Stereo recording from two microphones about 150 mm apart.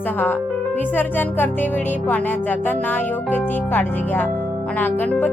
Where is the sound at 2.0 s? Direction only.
10° left (ahead or behind).